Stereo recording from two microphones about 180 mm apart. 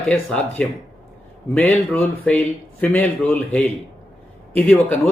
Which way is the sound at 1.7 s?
10° left (ahead or behind).